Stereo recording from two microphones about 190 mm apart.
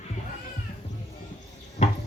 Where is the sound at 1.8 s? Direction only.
40° left (ahead or behind).